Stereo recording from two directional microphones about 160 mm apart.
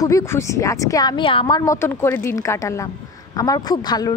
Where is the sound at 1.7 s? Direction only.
15° left (ahead or behind).